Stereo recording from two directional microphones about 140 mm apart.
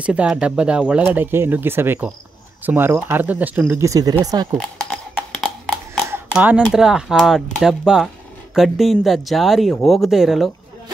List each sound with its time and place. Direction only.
0.0 s speech: 10° right (ahead or behind)
3.8 s speech: 25° right (ahead or behind)
6.3 s speech: 10° right (ahead or behind)